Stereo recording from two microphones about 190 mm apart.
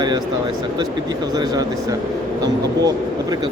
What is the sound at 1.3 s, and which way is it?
Speech, 20° right (ahead or behind).